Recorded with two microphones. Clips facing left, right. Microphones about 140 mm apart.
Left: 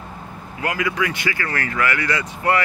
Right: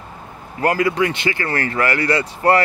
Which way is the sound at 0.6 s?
40° right (ahead or behind).